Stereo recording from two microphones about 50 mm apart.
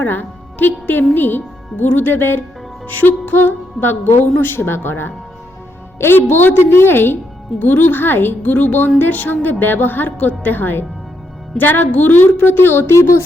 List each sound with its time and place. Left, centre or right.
0.0 s a woman's voice: left
2.8 s a woman's voice: left